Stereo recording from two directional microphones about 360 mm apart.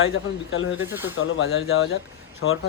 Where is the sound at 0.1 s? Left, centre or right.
Left.